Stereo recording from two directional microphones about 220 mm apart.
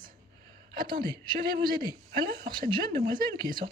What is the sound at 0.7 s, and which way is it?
Speech, 20° right (ahead or behind).